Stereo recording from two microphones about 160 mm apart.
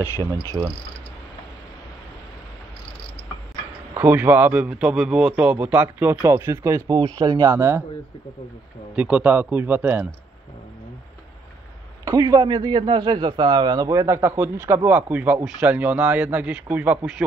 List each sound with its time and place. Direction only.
0.6 s a man's voice: 10° right (ahead or behind)
3.9 s a man's voice: 10° right (ahead or behind)
8.9 s a man's voice: 10° right (ahead or behind)
12.0 s a man's voice: 20° right (ahead or behind)